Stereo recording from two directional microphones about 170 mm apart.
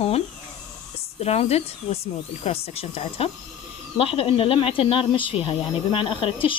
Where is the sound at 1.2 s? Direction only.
40° left (ahead or behind).